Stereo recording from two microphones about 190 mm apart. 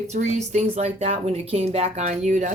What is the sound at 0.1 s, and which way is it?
Speech, 35° right (ahead or behind).